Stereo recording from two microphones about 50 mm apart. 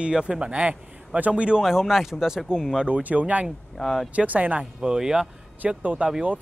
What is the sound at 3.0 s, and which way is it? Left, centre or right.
Speech, right.